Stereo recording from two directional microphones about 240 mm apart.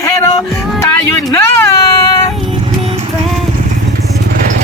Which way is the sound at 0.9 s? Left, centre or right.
Centre.